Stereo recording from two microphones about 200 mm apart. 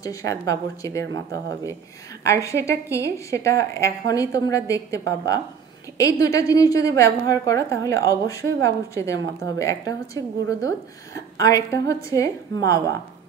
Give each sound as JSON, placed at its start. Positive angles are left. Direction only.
{"t": 0.0, "sound": "a woman's voice", "side_deg": 15}
{"t": 11.1, "sound": "a woman's voice", "side_deg": 15}